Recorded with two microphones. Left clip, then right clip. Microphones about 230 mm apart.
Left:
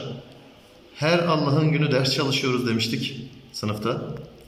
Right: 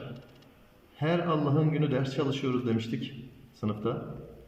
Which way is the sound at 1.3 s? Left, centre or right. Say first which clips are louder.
Left 6 dB; left.